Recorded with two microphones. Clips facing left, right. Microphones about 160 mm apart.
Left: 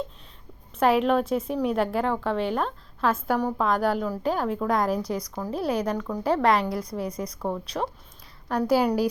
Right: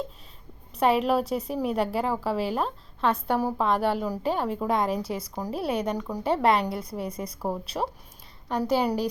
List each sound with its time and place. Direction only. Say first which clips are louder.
0.7 s a woman's voice: left 2 dB; centre (ahead or behind)
6.3 s a woman's voice: left 1 dB; centre (ahead or behind)
7.7 s speech: even; 15° right (ahead or behind)
8.4 s a woman's voice: left 2 dB; centre (ahead or behind)